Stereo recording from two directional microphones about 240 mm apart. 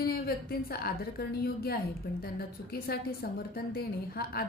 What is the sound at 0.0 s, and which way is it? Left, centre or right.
A woman's voice, left.